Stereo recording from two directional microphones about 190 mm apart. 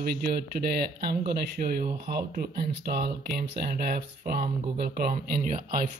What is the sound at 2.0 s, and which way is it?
Speech, 55° right (ahead or behind).